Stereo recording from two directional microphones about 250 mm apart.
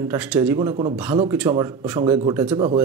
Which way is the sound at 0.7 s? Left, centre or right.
Right.